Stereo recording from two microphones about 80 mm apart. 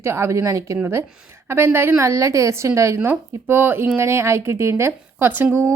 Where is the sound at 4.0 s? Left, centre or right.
Right.